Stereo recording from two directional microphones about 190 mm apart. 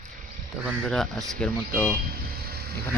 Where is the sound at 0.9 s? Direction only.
Centre (ahead or behind).